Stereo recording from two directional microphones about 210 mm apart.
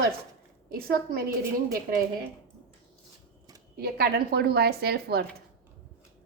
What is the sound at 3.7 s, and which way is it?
Speech, 50° right (ahead or behind).